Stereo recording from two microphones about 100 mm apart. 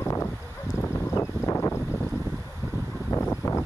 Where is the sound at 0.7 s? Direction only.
30° left (ahead or behind).